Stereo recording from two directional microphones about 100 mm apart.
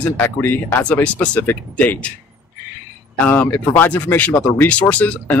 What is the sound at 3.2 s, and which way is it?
Speech, 20° left (ahead or behind).